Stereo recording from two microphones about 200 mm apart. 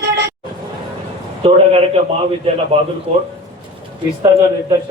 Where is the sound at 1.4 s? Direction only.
30° right (ahead or behind).